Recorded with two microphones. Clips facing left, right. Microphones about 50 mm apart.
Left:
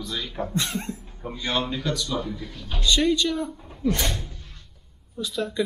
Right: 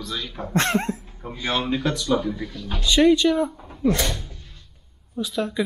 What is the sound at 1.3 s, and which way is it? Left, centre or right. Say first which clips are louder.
Speech: right 3 dB; centre.